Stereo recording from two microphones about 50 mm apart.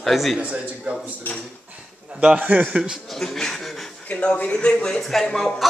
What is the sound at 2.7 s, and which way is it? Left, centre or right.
Speech, centre.